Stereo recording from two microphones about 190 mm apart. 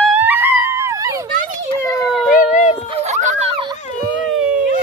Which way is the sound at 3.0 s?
35° right (ahead or behind).